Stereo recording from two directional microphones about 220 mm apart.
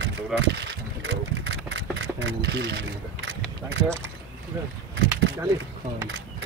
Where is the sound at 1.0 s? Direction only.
60° right (ahead or behind).